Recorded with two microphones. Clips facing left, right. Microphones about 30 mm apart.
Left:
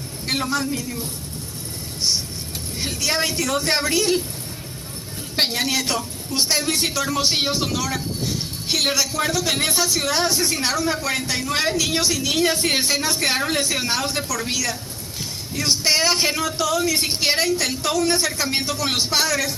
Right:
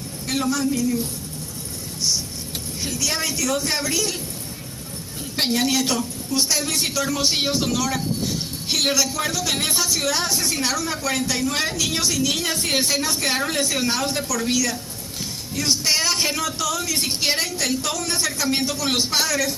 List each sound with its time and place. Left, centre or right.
0.3 s a woman's voice: left
2.0 s speech: left
5.4 s a woman's voice: centre
6.3 s speech: left
6.7 s a woman's voice: centre